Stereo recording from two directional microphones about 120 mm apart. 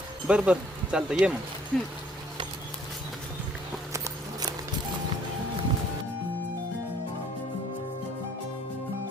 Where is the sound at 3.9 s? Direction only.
30° right (ahead or behind).